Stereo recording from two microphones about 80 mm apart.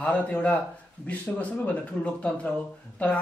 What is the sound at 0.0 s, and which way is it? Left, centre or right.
A man's voice, centre.